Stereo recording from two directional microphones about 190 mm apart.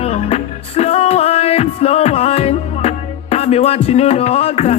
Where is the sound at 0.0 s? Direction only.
35° left (ahead or behind).